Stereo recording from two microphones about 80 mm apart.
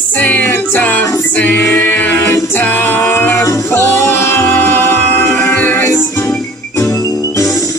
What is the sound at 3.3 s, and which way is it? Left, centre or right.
Music, left.